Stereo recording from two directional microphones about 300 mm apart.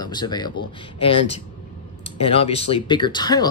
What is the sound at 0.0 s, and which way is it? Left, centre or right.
Speech, centre.